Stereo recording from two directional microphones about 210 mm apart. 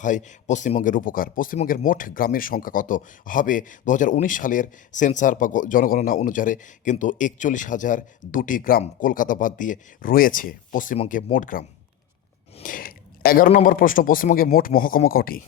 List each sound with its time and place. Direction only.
0.0 s speech: 35° left (ahead or behind)
12.6 s speech: 45° left (ahead or behind)